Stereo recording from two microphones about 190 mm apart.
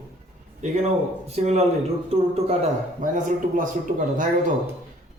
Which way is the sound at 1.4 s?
35° right (ahead or behind).